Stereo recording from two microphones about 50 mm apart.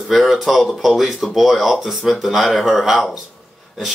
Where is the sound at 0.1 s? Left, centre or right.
Centre.